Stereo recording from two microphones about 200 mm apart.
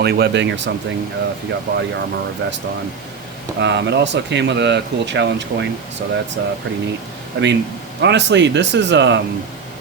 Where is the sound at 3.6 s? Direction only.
60° right (ahead or behind).